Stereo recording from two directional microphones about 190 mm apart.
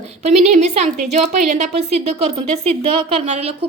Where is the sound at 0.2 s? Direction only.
35° right (ahead or behind).